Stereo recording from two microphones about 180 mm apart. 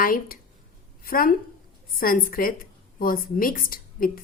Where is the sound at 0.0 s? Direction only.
50° left (ahead or behind).